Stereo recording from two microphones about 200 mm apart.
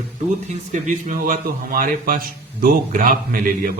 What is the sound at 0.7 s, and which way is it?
A man's voice, 40° right (ahead or behind).